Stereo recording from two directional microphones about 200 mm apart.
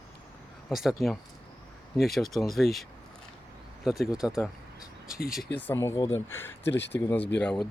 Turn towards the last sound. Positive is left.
turn(degrees=5)  # may be behind; listen again after turning